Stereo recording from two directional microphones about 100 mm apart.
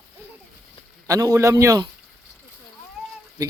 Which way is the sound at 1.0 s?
35° right (ahead or behind).